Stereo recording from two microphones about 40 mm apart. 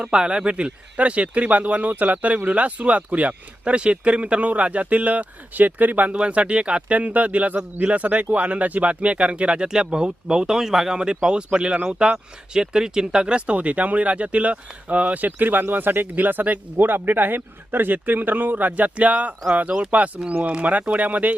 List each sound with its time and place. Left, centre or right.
0.0 s speech: right
6.1 s speech: right; by 11.0 s centre
11.3 s speech: right
16.7 s speech: right